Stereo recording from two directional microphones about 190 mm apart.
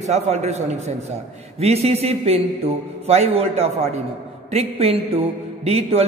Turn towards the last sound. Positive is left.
turn(degrees=-30)  # may be behind; listen again after turning